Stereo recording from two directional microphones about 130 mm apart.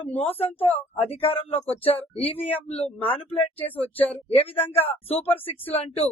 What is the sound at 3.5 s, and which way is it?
Speech, 15° left (ahead or behind).